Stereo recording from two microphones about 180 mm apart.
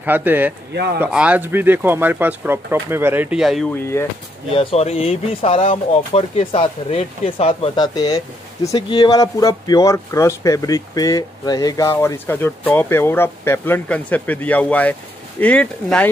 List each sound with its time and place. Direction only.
0.0 s speech: 10° right (ahead or behind)
3.9 s speech: 15° left (ahead or behind)
4.6 s speech: 35° left (ahead or behind); by 16.1 s 5° left (ahead or behind)